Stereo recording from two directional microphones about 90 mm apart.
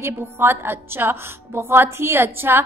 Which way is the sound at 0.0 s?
25° right (ahead or behind).